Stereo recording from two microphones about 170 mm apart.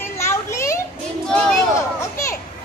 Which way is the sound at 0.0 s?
15° left (ahead or behind).